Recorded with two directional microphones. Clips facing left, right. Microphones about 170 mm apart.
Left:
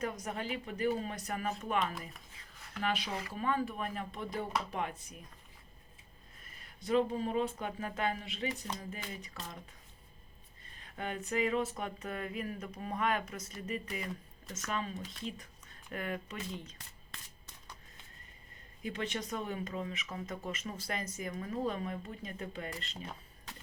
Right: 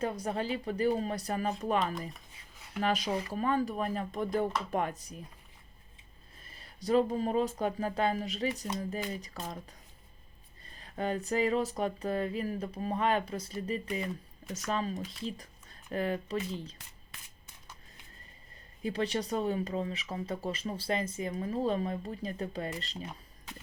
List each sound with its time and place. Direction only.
0.0 s speech: 30° right (ahead or behind)
6.4 s speech: 30° right (ahead or behind)
10.8 s speech: 35° right (ahead or behind)
18.8 s speech: 35° right (ahead or behind)